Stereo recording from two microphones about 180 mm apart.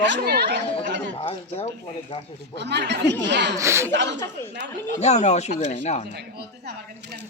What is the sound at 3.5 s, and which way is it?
Speech, 15° right (ahead or behind).